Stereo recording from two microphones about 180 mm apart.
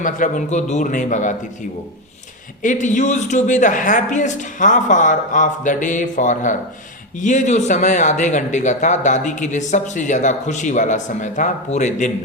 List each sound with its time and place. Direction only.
0.0 s speech: 45° left (ahead or behind)
2.6 s speech: 45° left (ahead or behind)